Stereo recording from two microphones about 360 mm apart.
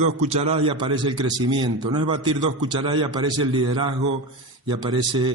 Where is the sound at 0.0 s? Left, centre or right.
Centre.